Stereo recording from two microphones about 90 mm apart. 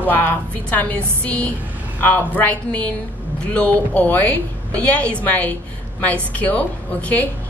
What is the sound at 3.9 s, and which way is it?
Speech, 15° left (ahead or behind).